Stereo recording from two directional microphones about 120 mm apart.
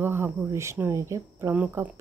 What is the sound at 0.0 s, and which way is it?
A woman's voice, 20° right (ahead or behind).